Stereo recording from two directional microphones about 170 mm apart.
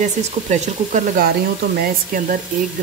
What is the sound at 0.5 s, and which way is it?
Speech, 45° right (ahead or behind).